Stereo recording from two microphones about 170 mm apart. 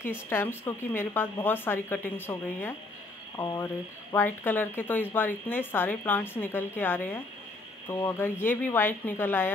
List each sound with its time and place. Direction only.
0.0 s speech: 15° left (ahead or behind)